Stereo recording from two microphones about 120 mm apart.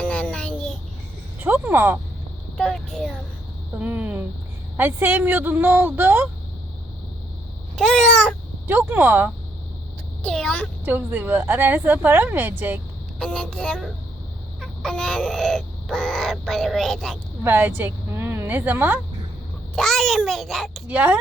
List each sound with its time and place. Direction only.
0.0 s child singing: 10° left (ahead or behind)
1.4 s speech: 15° right (ahead or behind)
2.6 s crow: 5° left (ahead or behind)
3.8 s a woman's voice: 15° right (ahead or behind)
7.8 s speech: 5° left (ahead or behind)
8.6 s a woman's voice: 15° right (ahead or behind)
10.2 s speech: 10° left (ahead or behind)
10.8 s a woman's voice: 15° right (ahead or behind)
13.1 s speech: 5° left (ahead or behind)
14.6 s crow: 5° left (ahead or behind)
17.4 s a woman's voice: 20° right (ahead or behind)
19.7 s crow: 5° left (ahead or behind)
20.8 s a woman's voice: 10° right (ahead or behind)